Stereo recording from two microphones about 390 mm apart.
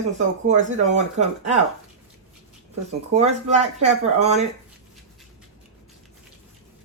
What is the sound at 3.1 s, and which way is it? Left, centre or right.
Speech, centre.